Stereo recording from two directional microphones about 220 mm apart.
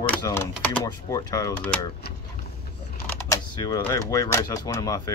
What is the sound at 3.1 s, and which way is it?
Speech, 15° left (ahead or behind).